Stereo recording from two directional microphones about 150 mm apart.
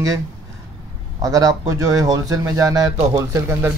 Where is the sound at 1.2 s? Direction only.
25° right (ahead or behind).